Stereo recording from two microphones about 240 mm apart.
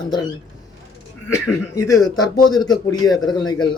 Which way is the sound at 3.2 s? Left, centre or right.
Centre.